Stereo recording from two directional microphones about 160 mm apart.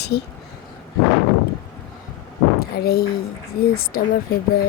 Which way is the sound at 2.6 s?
75° left (ahead or behind).